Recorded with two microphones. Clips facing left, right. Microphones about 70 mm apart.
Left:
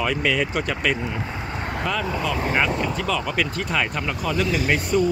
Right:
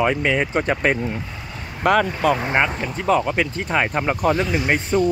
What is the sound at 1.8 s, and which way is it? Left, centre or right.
Speech, right.